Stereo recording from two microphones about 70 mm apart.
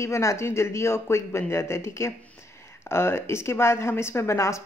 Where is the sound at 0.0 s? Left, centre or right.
Left.